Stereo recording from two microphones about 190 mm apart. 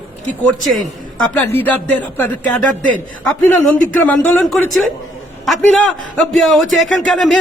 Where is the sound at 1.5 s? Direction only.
10° left (ahead or behind).